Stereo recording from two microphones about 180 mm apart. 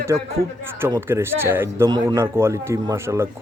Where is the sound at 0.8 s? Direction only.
15° right (ahead or behind).